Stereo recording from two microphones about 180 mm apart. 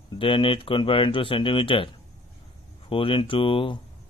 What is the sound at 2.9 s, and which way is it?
Speech, 30° left (ahead or behind).